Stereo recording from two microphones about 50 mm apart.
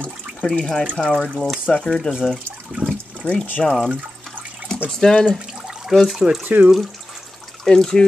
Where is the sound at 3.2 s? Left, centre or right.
Left.